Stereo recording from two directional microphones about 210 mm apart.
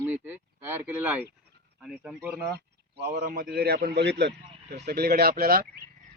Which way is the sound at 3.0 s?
45° right (ahead or behind).